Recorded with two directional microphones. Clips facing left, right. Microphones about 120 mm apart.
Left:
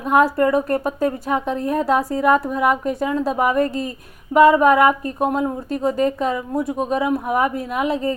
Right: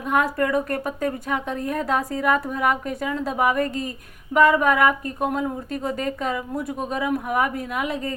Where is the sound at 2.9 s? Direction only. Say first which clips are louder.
Left 4 dB; 30° left (ahead or behind).